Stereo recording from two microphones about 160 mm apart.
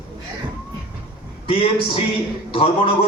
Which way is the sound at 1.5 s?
35° left (ahead or behind).